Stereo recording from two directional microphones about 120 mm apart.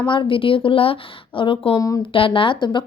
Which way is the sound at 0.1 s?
45° left (ahead or behind).